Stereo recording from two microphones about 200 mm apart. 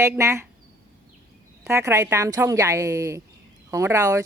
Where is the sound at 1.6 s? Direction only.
15° right (ahead or behind).